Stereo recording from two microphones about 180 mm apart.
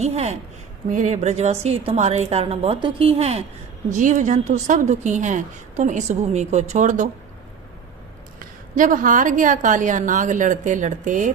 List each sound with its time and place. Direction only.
0.0 s a woman's voice: 35° right (ahead or behind)
8.4 s a woman's voice: 50° right (ahead or behind)